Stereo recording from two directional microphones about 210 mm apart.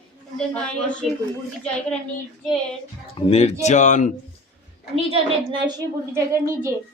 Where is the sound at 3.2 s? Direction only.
30° left (ahead or behind).